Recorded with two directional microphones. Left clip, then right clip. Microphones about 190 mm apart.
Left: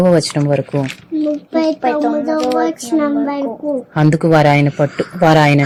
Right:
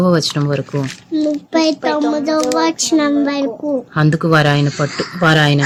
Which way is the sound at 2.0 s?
15° right (ahead or behind).